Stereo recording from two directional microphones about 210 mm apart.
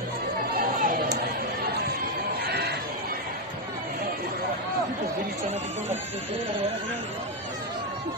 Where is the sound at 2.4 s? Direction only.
50° right (ahead or behind).